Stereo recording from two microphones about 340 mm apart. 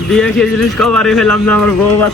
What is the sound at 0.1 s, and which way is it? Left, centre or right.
Speech, centre.